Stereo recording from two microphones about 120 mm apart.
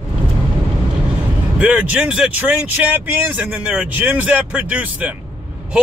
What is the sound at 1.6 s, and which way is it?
Speech, 10° right (ahead or behind).